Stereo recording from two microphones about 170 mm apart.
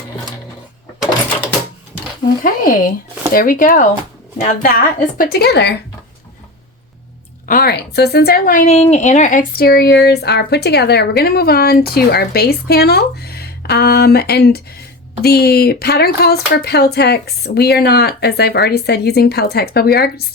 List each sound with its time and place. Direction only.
2.4 s a woman's voice: 55° left (ahead or behind); by 5.7 s 75° left (ahead or behind)
7.4 s a woman's voice: 60° left (ahead or behind)